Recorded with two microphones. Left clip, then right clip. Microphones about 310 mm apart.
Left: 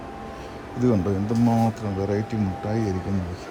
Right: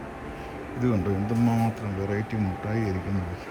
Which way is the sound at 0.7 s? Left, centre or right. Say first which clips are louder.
Left 4 dB; centre.